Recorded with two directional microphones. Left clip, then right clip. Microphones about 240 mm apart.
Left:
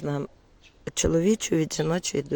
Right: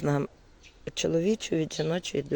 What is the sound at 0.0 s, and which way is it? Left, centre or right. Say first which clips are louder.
Speech: right 2 dB; centre.